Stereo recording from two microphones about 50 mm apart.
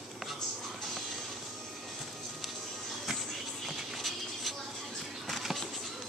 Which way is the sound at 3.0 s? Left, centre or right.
Centre.